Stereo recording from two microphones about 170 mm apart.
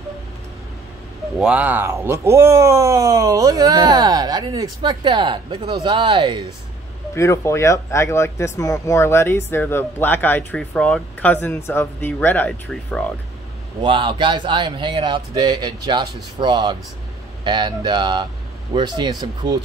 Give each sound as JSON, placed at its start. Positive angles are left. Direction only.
{"t": 1.4, "sound": "speech", "side_deg": -10}
{"t": 7.2, "sound": "speech", "side_deg": 15}
{"t": 13.8, "sound": "speech", "side_deg": -30}